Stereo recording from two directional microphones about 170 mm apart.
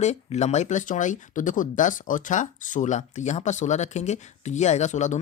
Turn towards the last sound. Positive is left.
turn(degrees=45)  # may be behind; listen again after turning